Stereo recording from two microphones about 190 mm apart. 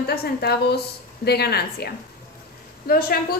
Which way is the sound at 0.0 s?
55° left (ahead or behind).